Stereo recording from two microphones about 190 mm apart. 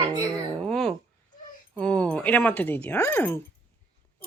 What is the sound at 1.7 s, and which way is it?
Speech, 5° left (ahead or behind).